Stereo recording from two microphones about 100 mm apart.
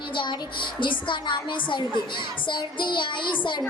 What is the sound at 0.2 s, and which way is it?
Child singing, 55° left (ahead or behind).